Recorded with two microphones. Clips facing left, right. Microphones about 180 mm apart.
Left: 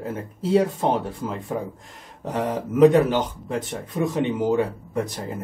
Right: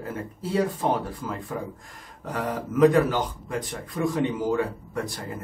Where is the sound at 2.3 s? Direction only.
25° left (ahead or behind).